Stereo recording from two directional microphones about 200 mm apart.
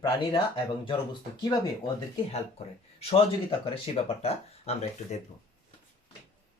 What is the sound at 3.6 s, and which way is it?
Speech, 30° left (ahead or behind).